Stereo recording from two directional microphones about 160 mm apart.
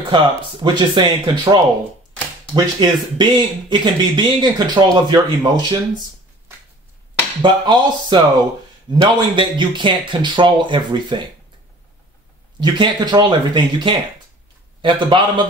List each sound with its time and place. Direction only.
0.1 s speech: 30° right (ahead or behind)
7.4 s speech: 30° right (ahead or behind)
12.5 s a man's voice: 30° right (ahead or behind)